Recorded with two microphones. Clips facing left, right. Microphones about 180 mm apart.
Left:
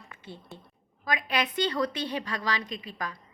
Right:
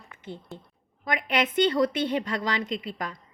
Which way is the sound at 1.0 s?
20° right (ahead or behind).